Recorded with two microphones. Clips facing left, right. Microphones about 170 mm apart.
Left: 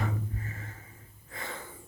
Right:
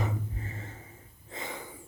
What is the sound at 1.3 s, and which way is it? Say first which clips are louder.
Sneeze: right 2 dB; 20° right (ahead or behind).